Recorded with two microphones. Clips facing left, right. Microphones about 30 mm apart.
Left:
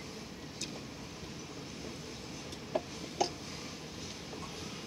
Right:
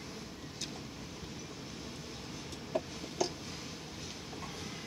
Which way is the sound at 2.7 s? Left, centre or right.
Centre.